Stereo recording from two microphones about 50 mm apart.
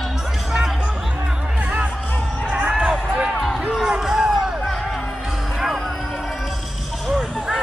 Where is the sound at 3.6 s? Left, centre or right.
Centre.